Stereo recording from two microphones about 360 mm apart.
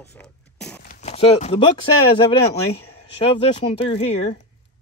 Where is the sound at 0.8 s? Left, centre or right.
Centre.